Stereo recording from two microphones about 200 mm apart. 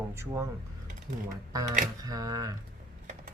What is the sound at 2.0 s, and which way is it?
Speech, 20° right (ahead or behind).